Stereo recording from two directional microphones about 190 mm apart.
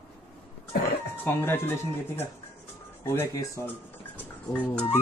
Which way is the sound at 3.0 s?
15° left (ahead or behind).